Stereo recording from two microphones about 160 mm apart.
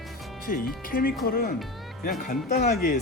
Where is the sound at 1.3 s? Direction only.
65° left (ahead or behind).